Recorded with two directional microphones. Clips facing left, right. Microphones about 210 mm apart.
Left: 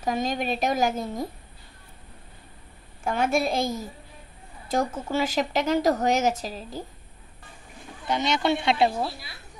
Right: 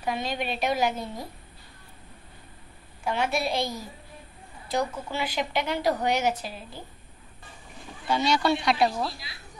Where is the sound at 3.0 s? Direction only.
50° left (ahead or behind).